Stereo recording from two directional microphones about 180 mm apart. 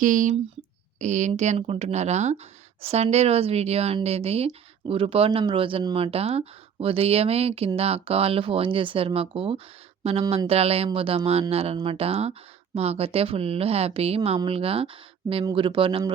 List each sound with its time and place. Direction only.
0.0 s speech: 45° right (ahead or behind); by 16.1 s 30° right (ahead or behind)